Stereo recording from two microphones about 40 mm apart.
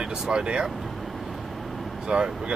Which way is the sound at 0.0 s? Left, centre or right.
Centre.